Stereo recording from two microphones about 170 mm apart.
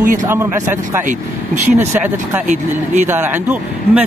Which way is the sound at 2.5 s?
45° right (ahead or behind).